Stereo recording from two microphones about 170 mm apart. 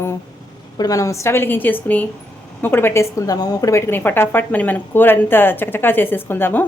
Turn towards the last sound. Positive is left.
turn(degrees=10)  # may be behind; listen again after turning